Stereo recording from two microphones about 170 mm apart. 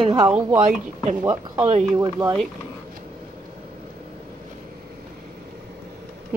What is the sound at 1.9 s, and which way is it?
Speech, 25° right (ahead or behind).